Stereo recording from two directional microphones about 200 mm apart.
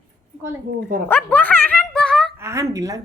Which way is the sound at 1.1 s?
10° left (ahead or behind).